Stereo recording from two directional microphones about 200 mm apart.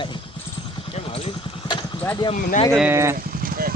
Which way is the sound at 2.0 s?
10° left (ahead or behind).